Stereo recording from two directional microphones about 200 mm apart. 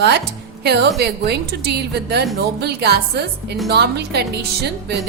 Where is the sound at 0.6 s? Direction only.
55° right (ahead or behind).